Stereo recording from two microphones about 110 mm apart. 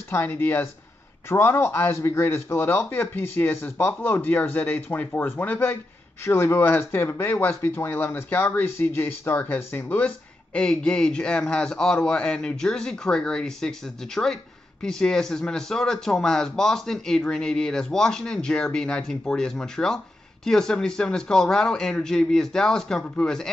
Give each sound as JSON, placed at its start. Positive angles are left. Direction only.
{"t": 0.1, "sound": "a man's voice", "side_deg": 20}